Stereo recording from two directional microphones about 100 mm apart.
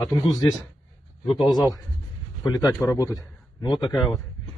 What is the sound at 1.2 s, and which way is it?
A man's voice, 45° left (ahead or behind).